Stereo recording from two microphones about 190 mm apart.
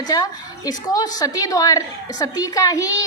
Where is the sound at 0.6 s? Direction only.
20° left (ahead or behind).